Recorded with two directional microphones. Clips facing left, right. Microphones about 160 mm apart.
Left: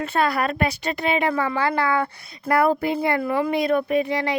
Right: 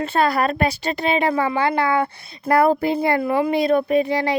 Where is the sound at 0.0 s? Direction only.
30° right (ahead or behind).